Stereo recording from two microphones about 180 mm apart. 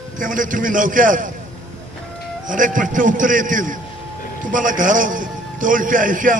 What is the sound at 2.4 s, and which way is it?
A man's voice, 45° right (ahead or behind).